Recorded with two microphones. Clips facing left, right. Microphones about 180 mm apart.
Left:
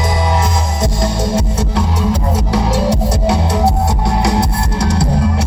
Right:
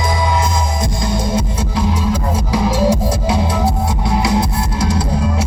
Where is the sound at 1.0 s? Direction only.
70° left (ahead or behind).